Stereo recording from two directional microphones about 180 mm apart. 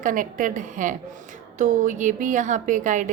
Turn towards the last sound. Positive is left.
turn(degrees=-45)  # may be behind; listen again after turning